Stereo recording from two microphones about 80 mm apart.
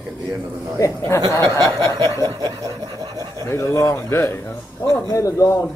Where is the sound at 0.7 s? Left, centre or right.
Left.